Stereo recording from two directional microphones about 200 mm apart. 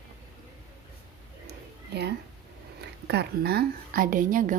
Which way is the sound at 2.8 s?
55° right (ahead or behind).